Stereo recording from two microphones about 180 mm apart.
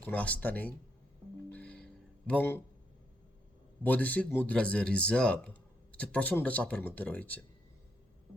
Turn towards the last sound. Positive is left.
turn(degrees=10)  # may be behind; listen again after turning